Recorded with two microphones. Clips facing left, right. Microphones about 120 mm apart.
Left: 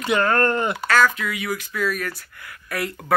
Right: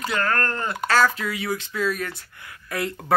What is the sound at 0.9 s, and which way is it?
Speech, 30° right (ahead or behind).